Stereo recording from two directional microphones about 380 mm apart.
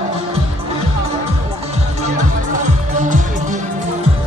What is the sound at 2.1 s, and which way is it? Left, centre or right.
Music, centre.